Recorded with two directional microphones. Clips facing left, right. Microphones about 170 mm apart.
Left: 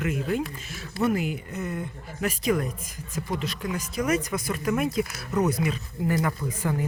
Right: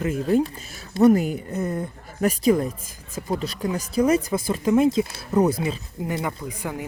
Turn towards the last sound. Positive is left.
turn(degrees=-15)  # may be behind; listen again after turning